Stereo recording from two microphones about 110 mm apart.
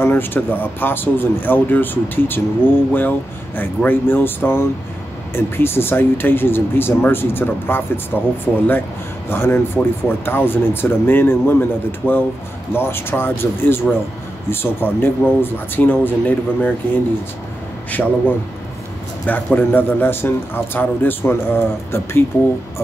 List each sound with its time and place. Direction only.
0.0 s speech: 20° left (ahead or behind)
9.3 s speech: 20° left (ahead or behind)
19.2 s speech: 15° left (ahead or behind)